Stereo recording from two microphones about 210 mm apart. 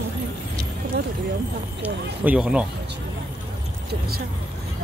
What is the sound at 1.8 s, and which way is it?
Speech, 5° right (ahead or behind).